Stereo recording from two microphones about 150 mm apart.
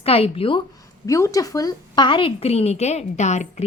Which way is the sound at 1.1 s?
20° left (ahead or behind).